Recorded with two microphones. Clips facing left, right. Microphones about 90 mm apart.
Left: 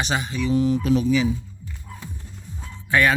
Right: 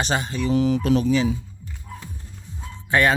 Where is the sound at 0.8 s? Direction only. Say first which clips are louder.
Even; 50° right (ahead or behind).